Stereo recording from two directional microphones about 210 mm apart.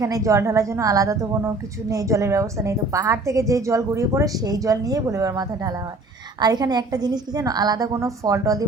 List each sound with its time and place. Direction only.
0.0 s a woman's voice: 15° right (ahead or behind)